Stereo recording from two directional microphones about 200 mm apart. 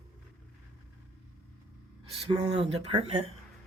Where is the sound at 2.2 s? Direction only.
30° right (ahead or behind).